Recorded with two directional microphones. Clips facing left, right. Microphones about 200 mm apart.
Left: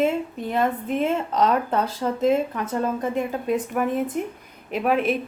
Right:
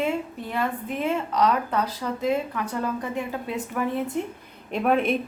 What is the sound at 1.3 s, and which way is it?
Speech, 25° left (ahead or behind).